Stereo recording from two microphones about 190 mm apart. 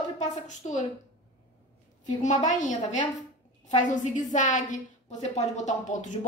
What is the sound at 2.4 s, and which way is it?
A woman's voice, 40° left (ahead or behind).